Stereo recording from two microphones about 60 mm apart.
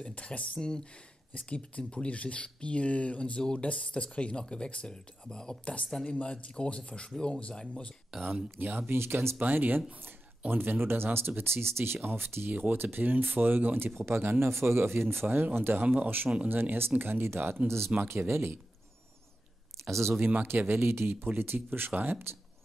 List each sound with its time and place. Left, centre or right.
0.0 s a man's voice: left
8.1 s speech: centre
8.5 s speech: right
9.4 s speech: right
13.9 s speech: right
20.2 s speech: right